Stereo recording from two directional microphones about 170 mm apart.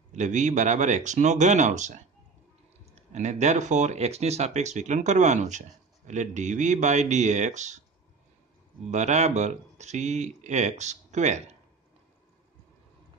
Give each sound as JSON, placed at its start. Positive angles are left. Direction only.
{"t": 0.1, "sound": "speech", "side_deg": -45}
{"t": 8.9, "sound": "speech", "side_deg": -40}